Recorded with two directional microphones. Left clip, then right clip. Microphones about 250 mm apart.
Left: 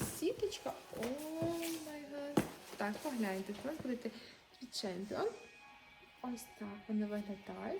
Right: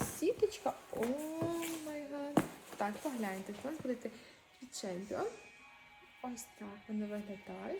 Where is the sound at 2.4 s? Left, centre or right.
Centre.